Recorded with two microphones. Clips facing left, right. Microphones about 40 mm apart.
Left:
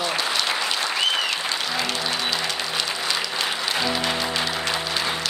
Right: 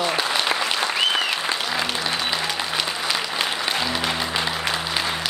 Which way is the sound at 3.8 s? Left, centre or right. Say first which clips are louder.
Even; centre.